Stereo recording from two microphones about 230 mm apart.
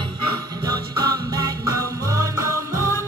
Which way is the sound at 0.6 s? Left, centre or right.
Centre.